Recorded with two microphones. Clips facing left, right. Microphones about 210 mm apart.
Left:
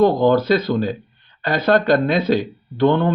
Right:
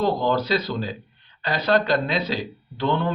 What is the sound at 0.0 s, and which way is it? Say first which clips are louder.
Speech: left 8 dB; 55° left (ahead or behind).